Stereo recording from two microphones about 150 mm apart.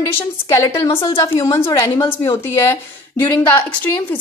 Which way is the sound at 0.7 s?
15° left (ahead or behind).